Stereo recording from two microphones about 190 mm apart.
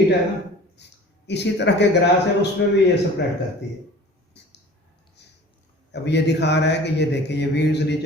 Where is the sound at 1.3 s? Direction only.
65° left (ahead or behind).